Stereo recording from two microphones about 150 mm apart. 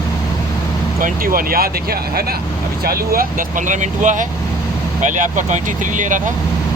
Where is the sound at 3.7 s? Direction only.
55° right (ahead or behind).